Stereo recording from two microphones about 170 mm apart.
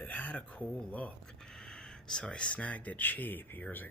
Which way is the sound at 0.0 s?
10° left (ahead or behind).